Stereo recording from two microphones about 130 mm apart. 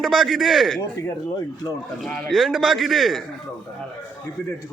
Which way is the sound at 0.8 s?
25° left (ahead or behind).